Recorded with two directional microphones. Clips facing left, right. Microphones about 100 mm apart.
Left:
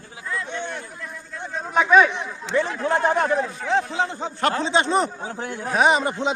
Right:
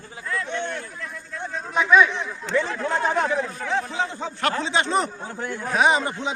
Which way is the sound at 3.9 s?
25° left (ahead or behind).